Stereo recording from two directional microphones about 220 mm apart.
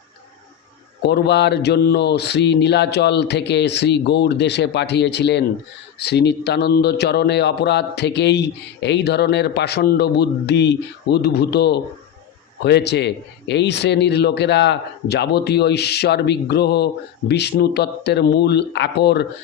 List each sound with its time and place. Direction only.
1.0 s a man's voice: 50° left (ahead or behind)